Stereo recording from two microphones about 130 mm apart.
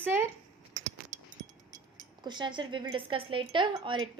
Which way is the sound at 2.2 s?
35° right (ahead or behind).